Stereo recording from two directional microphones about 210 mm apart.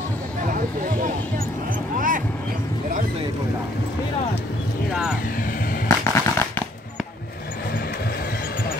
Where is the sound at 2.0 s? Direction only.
40° right (ahead or behind).